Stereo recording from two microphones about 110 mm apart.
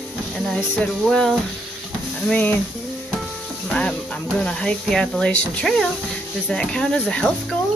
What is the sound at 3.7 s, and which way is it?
Speech, 5° left (ahead or behind).